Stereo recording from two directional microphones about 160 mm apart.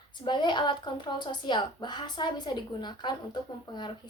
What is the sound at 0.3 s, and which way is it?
A woman's voice, 30° left (ahead or behind).